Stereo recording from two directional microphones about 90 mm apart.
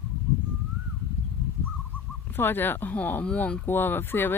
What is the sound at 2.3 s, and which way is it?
Speech, 25° left (ahead or behind).